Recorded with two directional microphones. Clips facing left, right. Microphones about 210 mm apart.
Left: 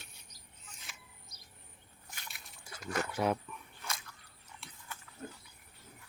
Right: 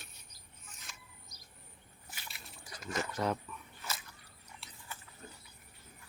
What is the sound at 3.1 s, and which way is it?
Speech, 15° left (ahead or behind).